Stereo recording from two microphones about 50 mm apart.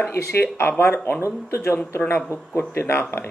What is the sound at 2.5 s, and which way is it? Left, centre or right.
Speech, left.